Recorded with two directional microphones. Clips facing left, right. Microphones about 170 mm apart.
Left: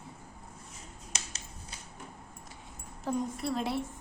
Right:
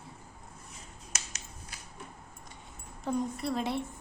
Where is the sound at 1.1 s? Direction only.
25° left (ahead or behind).